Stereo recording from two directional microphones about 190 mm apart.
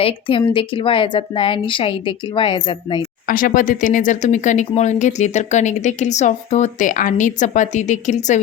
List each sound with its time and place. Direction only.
0.0 s a woman's voice: 30° left (ahead or behind)
3.2 s speech: 45° left (ahead or behind)